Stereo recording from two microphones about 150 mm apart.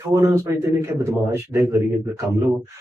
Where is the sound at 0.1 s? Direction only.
20° right (ahead or behind).